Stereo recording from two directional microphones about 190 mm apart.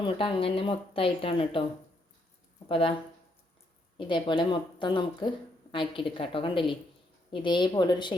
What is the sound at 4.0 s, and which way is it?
A woman's voice, 25° left (ahead or behind).